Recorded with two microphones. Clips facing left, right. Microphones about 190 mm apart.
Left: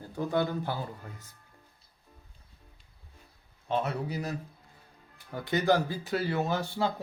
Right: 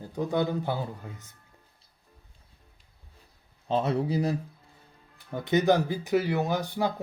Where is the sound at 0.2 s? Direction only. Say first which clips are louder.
Right 2 dB; 20° right (ahead or behind).